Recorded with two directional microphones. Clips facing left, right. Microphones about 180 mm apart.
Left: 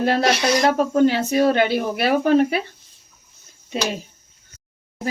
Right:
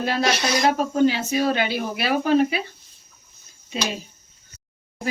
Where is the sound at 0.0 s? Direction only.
55° left (ahead or behind).